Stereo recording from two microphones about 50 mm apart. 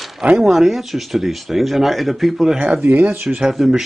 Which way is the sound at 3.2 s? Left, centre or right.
Centre.